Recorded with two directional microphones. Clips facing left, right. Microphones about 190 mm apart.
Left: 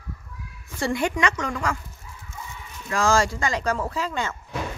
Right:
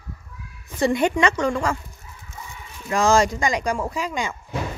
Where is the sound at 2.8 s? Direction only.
20° right (ahead or behind).